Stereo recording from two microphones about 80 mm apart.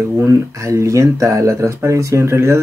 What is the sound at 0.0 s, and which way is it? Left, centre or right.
Speech, right.